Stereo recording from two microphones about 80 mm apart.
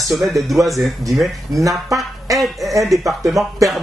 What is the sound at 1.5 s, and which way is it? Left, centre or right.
Speech, right.